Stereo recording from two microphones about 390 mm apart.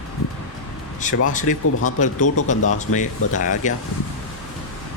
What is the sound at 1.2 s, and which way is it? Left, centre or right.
Speech, centre.